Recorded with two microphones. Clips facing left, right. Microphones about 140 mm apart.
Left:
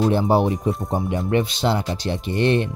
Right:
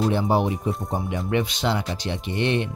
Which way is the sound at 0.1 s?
35° left (ahead or behind).